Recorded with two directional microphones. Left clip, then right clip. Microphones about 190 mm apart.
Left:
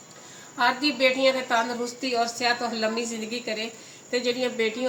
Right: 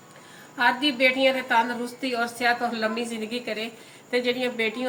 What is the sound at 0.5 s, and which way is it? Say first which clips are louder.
Speech: right 1 dB; 10° right (ahead or behind).